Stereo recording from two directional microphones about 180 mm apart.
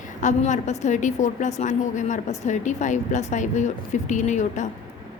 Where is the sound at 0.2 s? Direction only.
45° left (ahead or behind).